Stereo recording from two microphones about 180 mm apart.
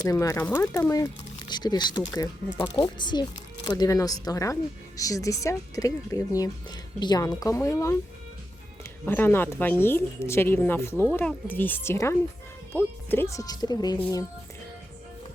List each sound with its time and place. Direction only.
0.0 s speech: 20° left (ahead or behind)
9.0 s speech: 10° left (ahead or behind)